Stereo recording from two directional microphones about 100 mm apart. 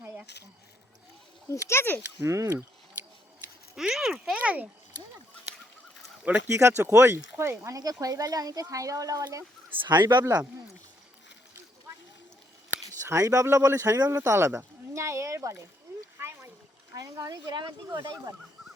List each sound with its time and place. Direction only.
0.0 s a sound: 25° right (ahead or behind)
1.5 s speech: 25° left (ahead or behind)
2.2 s speech: 30° right (ahead or behind)
3.8 s speech: 5° right (ahead or behind)
6.5 s speech: 30° right (ahead or behind)
9.8 s speech: 45° right (ahead or behind)
13.1 s speech: 30° right (ahead or behind)
16.1 s a sound: 25° right (ahead or behind)
16.9 s speech: 35° right (ahead or behind)
18.0 s speech: 35° right (ahead or behind)